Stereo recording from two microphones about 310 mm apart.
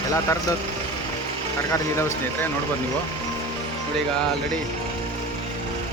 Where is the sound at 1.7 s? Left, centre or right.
Centre.